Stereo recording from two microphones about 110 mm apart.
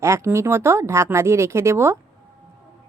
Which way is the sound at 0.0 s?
25° right (ahead or behind).